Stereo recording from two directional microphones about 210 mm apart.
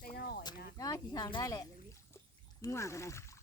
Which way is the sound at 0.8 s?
15° left (ahead or behind).